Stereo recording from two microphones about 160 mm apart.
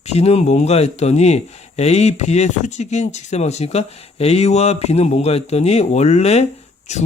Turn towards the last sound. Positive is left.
turn(degrees=45)  # may be behind; listen again after turning